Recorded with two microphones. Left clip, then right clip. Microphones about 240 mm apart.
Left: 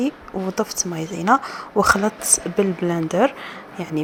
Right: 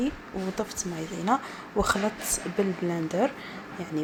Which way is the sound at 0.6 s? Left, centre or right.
Centre.